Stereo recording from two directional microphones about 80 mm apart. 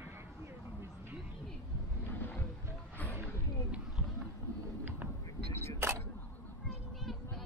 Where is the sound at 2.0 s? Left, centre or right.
Left.